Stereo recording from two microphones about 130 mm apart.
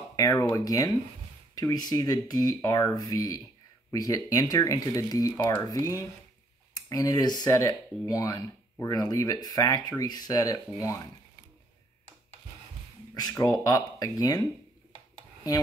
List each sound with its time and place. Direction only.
0.4 s speech: 25° left (ahead or behind)
13.3 s speech: 25° left (ahead or behind)